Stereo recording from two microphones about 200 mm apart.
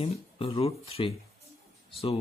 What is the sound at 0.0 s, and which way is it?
Speech, 30° left (ahead or behind).